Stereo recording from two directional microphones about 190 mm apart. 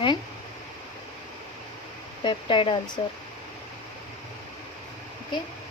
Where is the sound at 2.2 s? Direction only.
25° left (ahead or behind).